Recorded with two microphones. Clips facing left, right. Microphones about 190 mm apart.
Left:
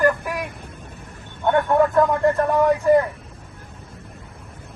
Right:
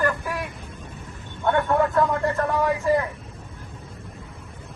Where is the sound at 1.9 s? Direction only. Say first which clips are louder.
Left 4 dB; 20° left (ahead or behind).